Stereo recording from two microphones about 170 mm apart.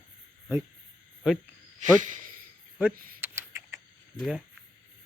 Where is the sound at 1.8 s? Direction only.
50° right (ahead or behind).